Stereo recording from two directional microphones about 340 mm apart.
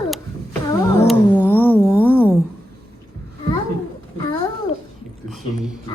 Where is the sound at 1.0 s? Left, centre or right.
Centre.